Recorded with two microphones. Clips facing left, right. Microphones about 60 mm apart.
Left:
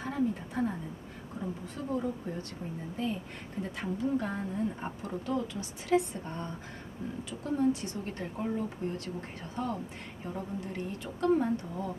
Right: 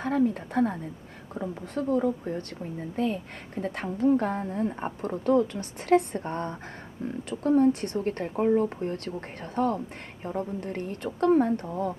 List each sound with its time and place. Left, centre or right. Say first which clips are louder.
0.0 s speech: right 6 dB; right